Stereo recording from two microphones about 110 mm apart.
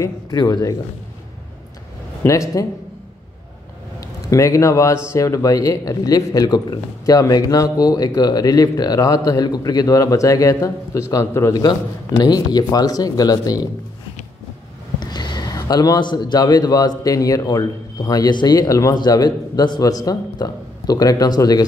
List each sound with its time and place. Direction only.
0.0 s speech: 35° left (ahead or behind)
2.2 s a man's voice: 30° left (ahead or behind)
4.0 s a man's voice: 30° left (ahead or behind)
12.2 s speech: 40° left (ahead or behind)
15.0 s a man's voice: 40° left (ahead or behind)